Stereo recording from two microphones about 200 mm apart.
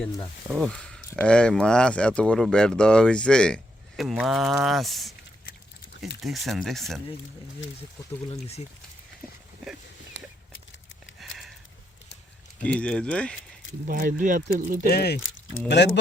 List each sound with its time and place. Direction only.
0.5 s speech: centre (ahead or behind)
6.2 s speech: centre (ahead or behind)
11.2 s sniff: centre (ahead or behind)
12.6 s speech: 5° left (ahead or behind)
13.8 s speech: 45° right (ahead or behind)
14.8 s speech: 50° left (ahead or behind)